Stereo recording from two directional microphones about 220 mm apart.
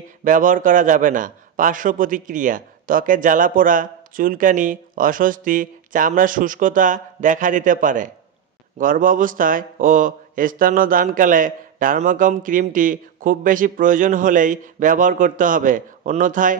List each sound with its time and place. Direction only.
0.2 s a man's voice: 35° right (ahead or behind)